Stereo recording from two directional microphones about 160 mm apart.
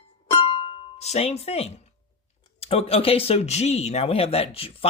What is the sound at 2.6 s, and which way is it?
Speech, 40° left (ahead or behind).